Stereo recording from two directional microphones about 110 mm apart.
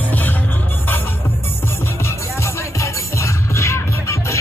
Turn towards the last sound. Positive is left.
turn(degrees=25)  # may be behind; listen again after turning